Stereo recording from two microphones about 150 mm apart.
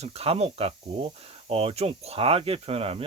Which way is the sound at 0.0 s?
40° right (ahead or behind).